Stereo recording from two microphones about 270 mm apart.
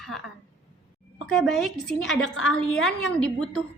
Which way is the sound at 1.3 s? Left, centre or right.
Centre.